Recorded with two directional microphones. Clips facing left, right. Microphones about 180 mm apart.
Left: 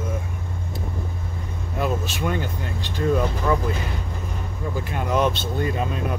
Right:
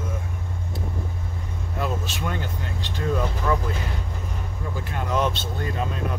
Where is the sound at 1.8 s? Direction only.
10° left (ahead or behind).